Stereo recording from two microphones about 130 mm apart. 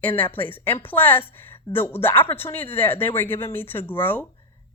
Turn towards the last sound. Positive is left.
turn(degrees=15)  # may be behind; listen again after turning